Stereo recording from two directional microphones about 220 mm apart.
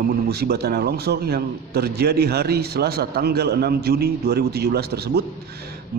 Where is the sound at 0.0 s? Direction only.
45° right (ahead or behind).